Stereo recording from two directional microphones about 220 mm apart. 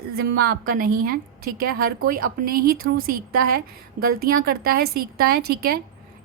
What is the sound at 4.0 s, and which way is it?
A woman's voice, 45° right (ahead or behind).